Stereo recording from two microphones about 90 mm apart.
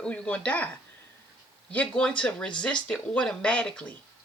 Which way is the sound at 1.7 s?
10° left (ahead or behind).